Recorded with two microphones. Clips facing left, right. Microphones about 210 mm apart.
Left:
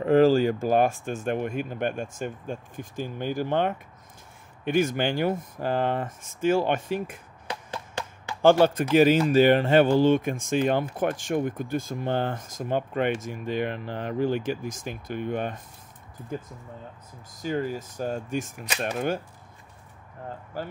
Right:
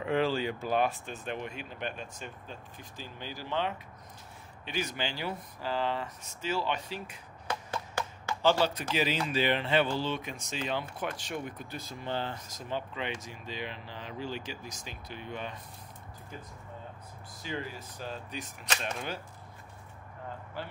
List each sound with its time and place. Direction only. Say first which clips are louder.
0.0 s speech: left 11 dB; 40° left (ahead or behind)
8.4 s speech: left 9 dB; 50° left (ahead or behind)
17.4 s speech: left 10 dB; 45° left (ahead or behind)
20.5 s speech: left 7 dB; 45° left (ahead or behind)